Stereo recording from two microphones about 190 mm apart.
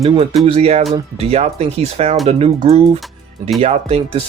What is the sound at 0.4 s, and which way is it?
Speech, 35° right (ahead or behind).